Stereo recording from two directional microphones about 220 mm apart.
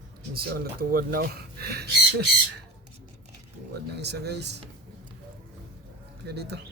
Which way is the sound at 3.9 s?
50° right (ahead or behind).